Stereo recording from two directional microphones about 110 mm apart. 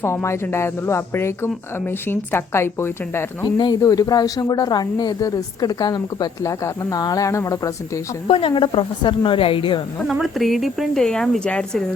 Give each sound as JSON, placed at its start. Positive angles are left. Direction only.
{"t": 0.0, "sound": "speech", "side_deg": 25}
{"t": 3.4, "sound": "speech", "side_deg": 40}
{"t": 8.3, "sound": "a woman's voice", "side_deg": 55}
{"t": 10.1, "sound": "speech", "side_deg": 0}